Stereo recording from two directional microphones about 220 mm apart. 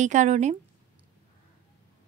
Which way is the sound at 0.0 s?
35° right (ahead or behind).